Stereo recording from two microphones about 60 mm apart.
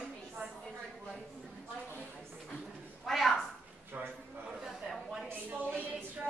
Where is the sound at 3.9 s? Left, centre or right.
Right.